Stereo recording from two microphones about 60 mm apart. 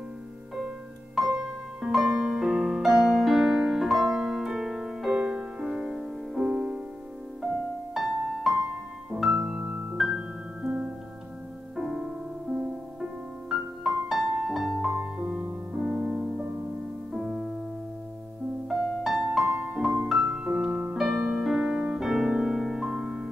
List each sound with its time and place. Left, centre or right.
1.3 s music: centre
7.9 s music: centre
9.3 s piano: centre
9.9 s music: centre
11.7 s music: centre
12.4 s music: right
13.5 s music: centre
18.7 s music: centre
22.0 s piano: centre